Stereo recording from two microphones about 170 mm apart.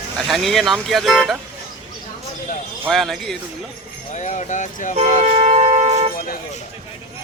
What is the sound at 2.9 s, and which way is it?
Speech, centre (ahead or behind).